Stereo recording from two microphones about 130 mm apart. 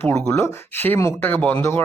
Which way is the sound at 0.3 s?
20° left (ahead or behind).